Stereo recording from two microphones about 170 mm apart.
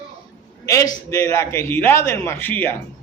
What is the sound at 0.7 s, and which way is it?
Speech, 20° left (ahead or behind).